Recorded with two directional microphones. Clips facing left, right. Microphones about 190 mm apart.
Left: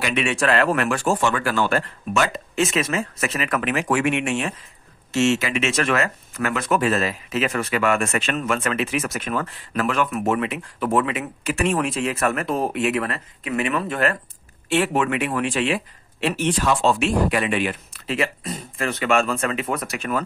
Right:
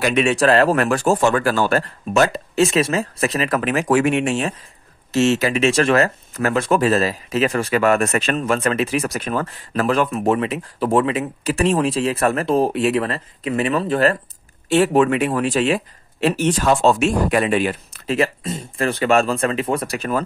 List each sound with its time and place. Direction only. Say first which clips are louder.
0.0 s speech: right 6 dB; 40° right (ahead or behind)
18.4 s speech: right 5 dB; 25° right (ahead or behind)